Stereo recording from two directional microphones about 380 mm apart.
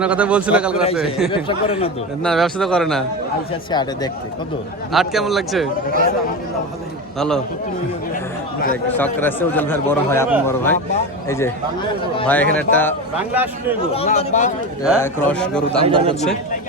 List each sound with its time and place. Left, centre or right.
0.0 s speech: centre
1.5 s speech: centre
2.2 s speech: centre
4.9 s speech: centre
7.2 s speech: centre
8.9 s speech: centre
13.9 s speech: centre
14.8 s speech: centre
15.8 s a man's voice: centre